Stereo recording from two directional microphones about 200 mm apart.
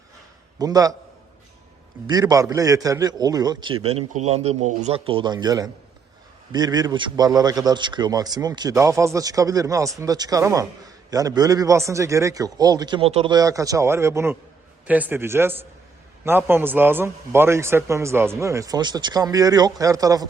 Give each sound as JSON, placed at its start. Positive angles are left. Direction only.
{"t": 0.6, "sound": "a man's voice", "side_deg": -20}
{"t": 2.0, "sound": "a man's voice", "side_deg": -20}
{"t": 13.3, "sound": "a man's voice", "side_deg": -15}